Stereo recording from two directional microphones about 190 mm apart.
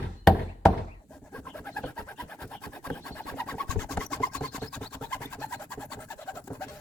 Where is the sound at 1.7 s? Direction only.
5° left (ahead or behind).